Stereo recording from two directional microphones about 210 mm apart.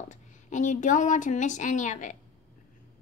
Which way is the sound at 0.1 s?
35° left (ahead or behind).